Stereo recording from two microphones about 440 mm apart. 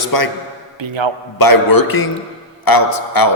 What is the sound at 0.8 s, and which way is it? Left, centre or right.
Speech, right.